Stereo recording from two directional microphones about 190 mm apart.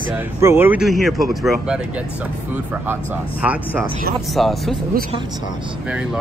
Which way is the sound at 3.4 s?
5° right (ahead or behind).